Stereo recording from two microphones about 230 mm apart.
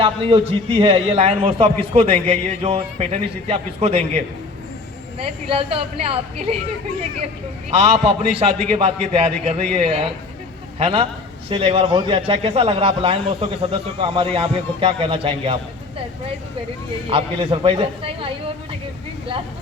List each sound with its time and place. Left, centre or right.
0.0 s a man's voice: right
5.5 s a man's voice: right
7.7 s a man's voice: right
17.1 s a man's voice: right